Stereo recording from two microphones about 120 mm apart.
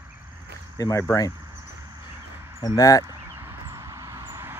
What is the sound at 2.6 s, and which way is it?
Speech, 30° left (ahead or behind).